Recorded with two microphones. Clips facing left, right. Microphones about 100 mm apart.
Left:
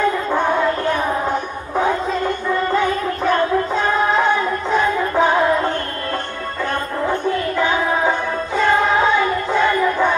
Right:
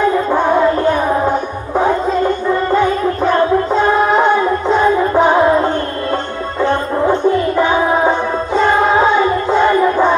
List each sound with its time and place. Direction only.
0.3 s music: 20° right (ahead or behind)
3.3 s music: 30° right (ahead or behind)